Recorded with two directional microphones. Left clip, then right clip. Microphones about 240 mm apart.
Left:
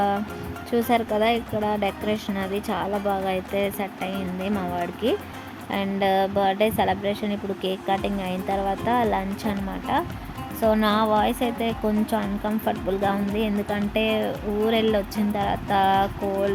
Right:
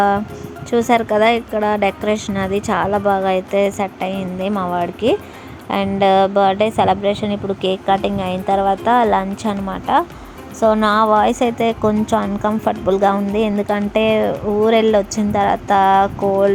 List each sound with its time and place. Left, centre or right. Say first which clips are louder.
0.7 s a woman's voice: right 8 dB; centre